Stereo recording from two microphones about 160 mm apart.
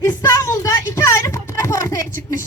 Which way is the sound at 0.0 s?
20° left (ahead or behind).